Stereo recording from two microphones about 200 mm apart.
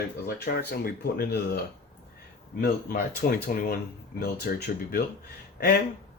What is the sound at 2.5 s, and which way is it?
Speech, 45° left (ahead or behind).